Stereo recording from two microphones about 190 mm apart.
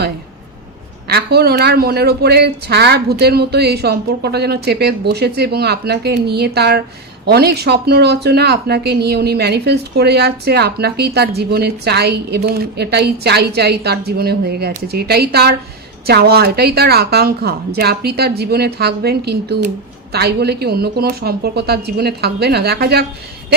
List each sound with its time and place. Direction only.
1.0 s speech: 55° right (ahead or behind)